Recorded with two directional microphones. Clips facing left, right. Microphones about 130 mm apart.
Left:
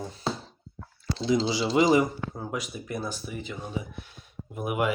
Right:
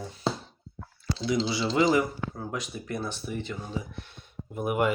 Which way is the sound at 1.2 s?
25° left (ahead or behind).